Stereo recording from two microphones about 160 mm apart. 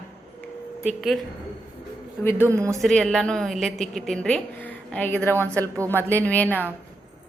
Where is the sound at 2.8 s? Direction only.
5° left (ahead or behind).